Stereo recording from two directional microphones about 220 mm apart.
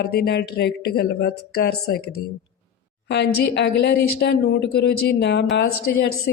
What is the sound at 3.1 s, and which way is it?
Speech, 50° left (ahead or behind).